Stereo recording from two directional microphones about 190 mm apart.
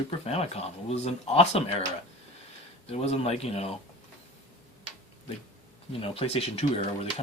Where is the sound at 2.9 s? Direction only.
35° left (ahead or behind).